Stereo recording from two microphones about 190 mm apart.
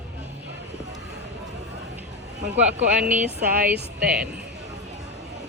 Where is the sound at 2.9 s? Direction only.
5° right (ahead or behind).